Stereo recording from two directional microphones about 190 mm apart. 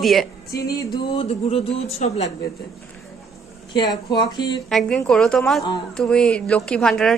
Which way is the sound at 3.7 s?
20° left (ahead or behind).